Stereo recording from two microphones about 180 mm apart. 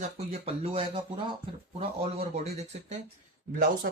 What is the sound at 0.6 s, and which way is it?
Speech, 30° right (ahead or behind).